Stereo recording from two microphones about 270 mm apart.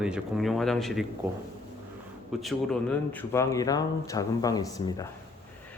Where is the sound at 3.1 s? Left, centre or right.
Centre.